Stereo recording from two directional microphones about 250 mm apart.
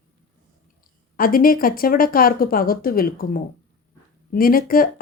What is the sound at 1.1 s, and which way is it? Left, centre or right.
Speech, left.